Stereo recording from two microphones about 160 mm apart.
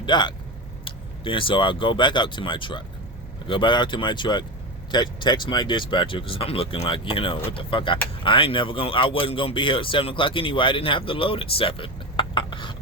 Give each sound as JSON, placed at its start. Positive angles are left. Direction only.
{"t": 0.0, "sound": "speech", "side_deg": 30}